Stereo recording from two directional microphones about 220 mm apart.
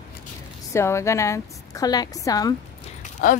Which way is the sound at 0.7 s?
10° left (ahead or behind).